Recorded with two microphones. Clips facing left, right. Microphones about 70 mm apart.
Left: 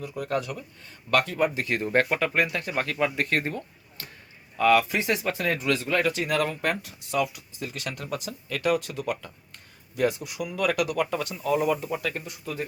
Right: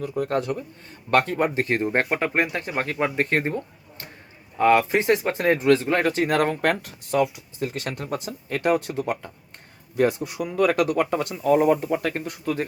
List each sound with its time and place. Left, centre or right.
0.1 s speech: right